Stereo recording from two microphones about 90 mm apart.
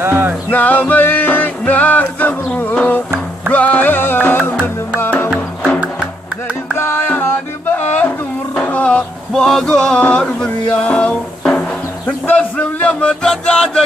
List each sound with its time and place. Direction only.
0.0 s music: 25° right (ahead or behind)
0.5 s music: 20° left (ahead or behind)
6.8 s music: 25° left (ahead or behind)
8.5 s male singing: 15° left (ahead or behind)
12.4 s music: 15° left (ahead or behind)